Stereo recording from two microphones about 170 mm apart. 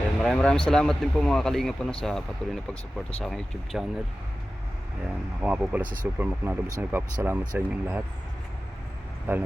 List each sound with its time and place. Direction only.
0.2 s speech: 5° left (ahead or behind)
5.0 s speech: 10° right (ahead or behind)
5.8 s speech: 55° right (ahead or behind)
6.1 s speech: 10° right (ahead or behind)
9.3 s speech: 10° right (ahead or behind)